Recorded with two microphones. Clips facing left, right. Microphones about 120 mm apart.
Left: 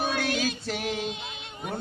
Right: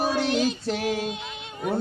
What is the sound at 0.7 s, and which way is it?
Female singing, 5° right (ahead or behind).